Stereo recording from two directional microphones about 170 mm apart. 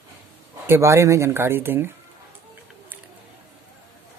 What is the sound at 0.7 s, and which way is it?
Speech, 15° right (ahead or behind).